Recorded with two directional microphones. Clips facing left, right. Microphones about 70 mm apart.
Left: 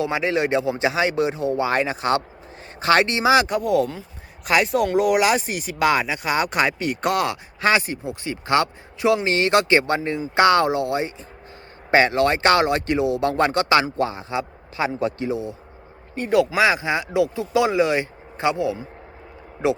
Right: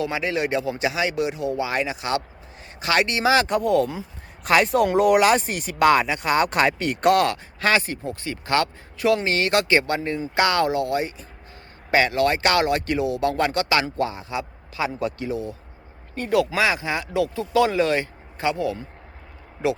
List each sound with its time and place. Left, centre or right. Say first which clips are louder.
0.0 s speech: left 3 dB; left
3.4 s speech: even; centre
7.6 s speech: left 2 dB; centre